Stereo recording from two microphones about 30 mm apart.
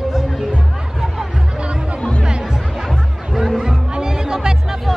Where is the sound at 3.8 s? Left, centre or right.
Right.